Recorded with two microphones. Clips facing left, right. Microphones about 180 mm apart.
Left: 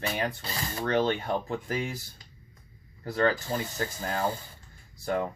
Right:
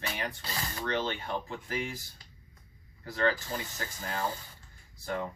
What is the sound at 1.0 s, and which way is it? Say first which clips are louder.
Speech: left 9 dB; 50° left (ahead or behind).